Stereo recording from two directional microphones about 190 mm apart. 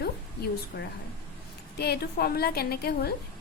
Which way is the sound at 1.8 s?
55° left (ahead or behind).